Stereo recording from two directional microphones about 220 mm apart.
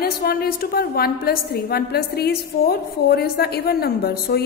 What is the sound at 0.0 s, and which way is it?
A woman's voice, 45° left (ahead or behind).